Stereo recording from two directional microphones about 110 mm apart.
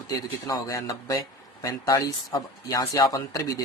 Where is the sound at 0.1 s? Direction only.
30° left (ahead or behind).